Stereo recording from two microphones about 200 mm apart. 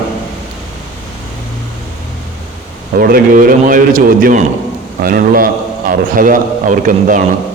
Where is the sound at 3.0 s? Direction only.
45° right (ahead or behind).